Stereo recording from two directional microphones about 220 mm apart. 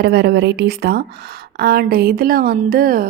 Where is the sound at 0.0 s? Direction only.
45° right (ahead or behind).